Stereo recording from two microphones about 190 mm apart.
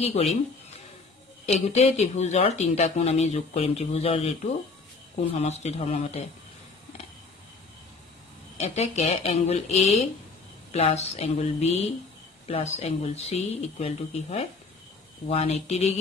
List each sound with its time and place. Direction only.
0.0 s speech: 35° left (ahead or behind)
1.7 s speech: 35° left (ahead or behind)
8.5 s speech: 35° left (ahead or behind)